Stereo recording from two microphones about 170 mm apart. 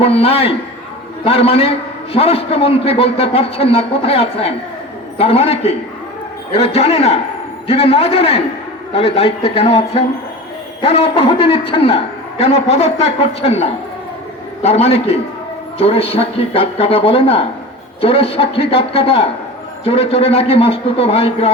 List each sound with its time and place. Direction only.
0.0 s a man's voice: 35° left (ahead or behind)